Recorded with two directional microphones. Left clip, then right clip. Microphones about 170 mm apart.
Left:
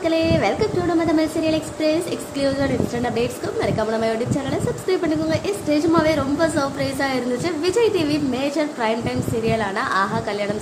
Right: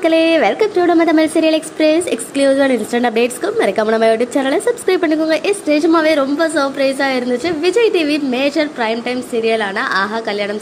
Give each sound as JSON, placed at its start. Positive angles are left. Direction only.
{"t": 0.0, "sound": "a woman's voice", "side_deg": -35}